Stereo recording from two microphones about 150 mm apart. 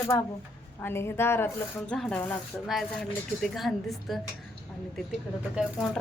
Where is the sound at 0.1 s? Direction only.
15° left (ahead or behind).